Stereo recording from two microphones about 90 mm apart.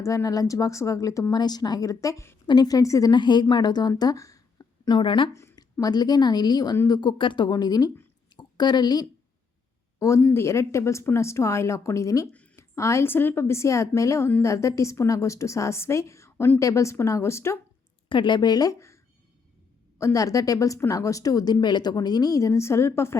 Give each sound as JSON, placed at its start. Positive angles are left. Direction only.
{"t": 0.0, "sound": "speech", "side_deg": 35}
{"t": 1.3, "sound": "speech", "side_deg": 50}
{"t": 2.5, "sound": "speech", "side_deg": 45}
{"t": 3.1, "sound": "a woman's voice", "side_deg": 55}
{"t": 5.3, "sound": "a sound", "side_deg": 30}
{"t": 5.8, "sound": "a woman's voice", "side_deg": 50}
{"t": 10.0, "sound": "speech", "side_deg": 35}
{"t": 18.1, "sound": "speech", "side_deg": 60}
{"t": 20.0, "sound": "speech", "side_deg": 35}